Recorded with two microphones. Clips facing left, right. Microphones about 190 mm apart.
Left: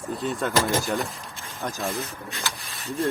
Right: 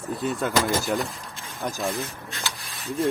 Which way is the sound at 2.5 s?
Centre (ahead or behind).